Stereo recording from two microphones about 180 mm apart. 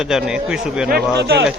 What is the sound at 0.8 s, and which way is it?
Speech, 60° right (ahead or behind).